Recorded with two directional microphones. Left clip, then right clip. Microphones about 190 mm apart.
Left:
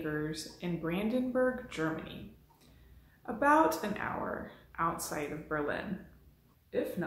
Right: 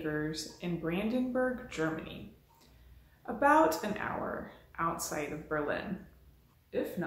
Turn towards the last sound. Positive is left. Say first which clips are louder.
# left 1 dB
turn(degrees=-5)  # may be behind; listen again after turning